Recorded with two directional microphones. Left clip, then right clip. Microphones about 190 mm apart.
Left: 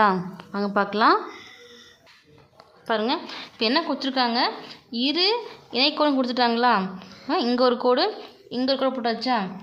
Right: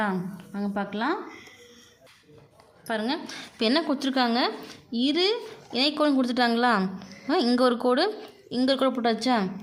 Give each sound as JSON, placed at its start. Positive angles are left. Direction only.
{"t": 0.0, "sound": "a woman's voice", "side_deg": 15}
{"t": 2.8, "sound": "a woman's voice", "side_deg": 0}
{"t": 3.2, "sound": "a woman's voice", "side_deg": -15}
{"t": 3.6, "sound": "a woman's voice", "side_deg": -30}